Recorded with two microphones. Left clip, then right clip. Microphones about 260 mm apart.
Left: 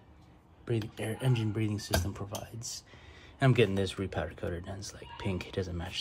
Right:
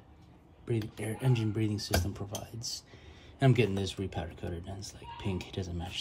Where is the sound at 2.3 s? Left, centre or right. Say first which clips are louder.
Right 1 dB; centre.